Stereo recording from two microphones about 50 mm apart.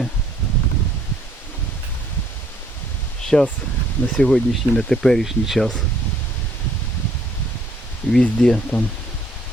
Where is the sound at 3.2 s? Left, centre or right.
Centre.